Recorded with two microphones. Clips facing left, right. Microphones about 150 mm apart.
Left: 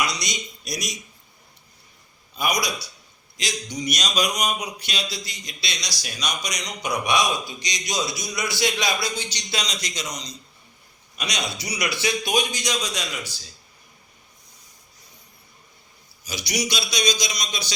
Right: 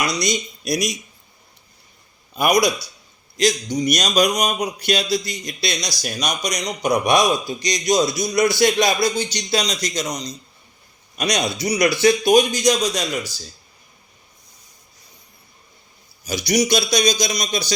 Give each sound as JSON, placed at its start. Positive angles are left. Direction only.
{"t": 0.0, "sound": "a man's voice", "side_deg": -40}
{"t": 0.6, "sound": "a man's voice", "side_deg": -65}
{"t": 2.3, "sound": "a man's voice", "side_deg": -60}
{"t": 3.3, "sound": "a man's voice", "side_deg": -40}
{"t": 16.2, "sound": "speech", "side_deg": -45}